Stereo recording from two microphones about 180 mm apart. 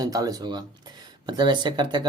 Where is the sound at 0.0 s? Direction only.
20° right (ahead or behind).